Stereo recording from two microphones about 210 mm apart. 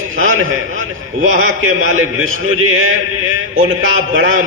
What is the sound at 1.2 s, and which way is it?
A man's voice, 70° right (ahead or behind).